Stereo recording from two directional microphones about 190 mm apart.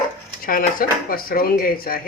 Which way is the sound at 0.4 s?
50° left (ahead or behind).